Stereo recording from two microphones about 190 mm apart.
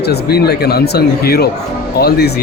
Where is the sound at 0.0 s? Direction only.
55° left (ahead or behind).